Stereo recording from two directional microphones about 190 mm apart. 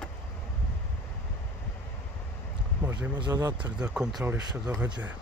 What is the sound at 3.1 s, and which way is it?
Speech, 20° right (ahead or behind).